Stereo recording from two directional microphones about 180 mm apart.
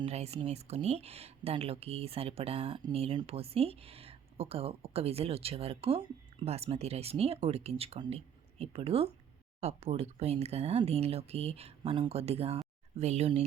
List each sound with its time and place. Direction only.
0.0 s speech: 35° right (ahead or behind)